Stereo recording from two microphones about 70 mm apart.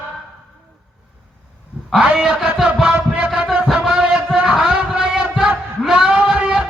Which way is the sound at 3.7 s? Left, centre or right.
Centre.